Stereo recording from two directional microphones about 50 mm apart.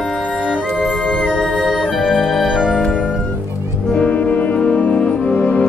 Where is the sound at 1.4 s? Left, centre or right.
Centre.